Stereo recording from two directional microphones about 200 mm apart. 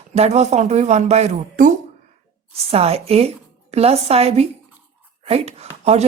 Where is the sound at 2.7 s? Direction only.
30° right (ahead or behind).